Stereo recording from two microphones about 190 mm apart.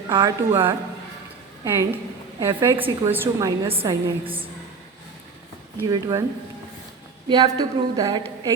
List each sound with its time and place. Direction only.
0.1 s a woman's voice: 20° right (ahead or behind)
3.7 s speech: 30° right (ahead or behind)
5.9 s speech: 20° right (ahead or behind)
7.3 s speech: 20° right (ahead or behind)